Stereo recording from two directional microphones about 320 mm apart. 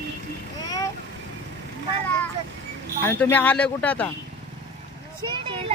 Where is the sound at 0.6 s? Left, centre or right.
Centre.